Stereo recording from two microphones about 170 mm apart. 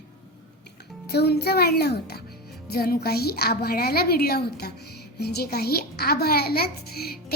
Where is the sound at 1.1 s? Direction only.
70° left (ahead or behind).